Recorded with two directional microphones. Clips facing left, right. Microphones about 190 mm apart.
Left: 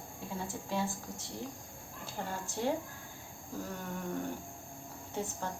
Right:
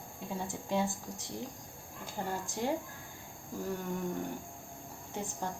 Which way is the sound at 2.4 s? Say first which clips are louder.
Even; 15° right (ahead or behind).